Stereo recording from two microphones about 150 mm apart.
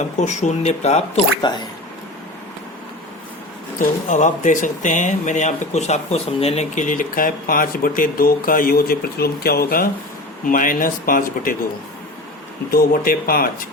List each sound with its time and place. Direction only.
0.2 s speech: 50° left (ahead or behind)
1.4 s speech: 30° left (ahead or behind)
3.8 s speech: 55° left (ahead or behind); by 9.9 s 80° left
10.4 s speech: 65° left (ahead or behind)
12.7 s speech: 75° left (ahead or behind)